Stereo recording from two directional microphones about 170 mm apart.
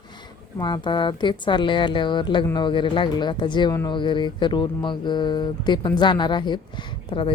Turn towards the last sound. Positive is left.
turn(degrees=30)  # may be behind; listen again after turning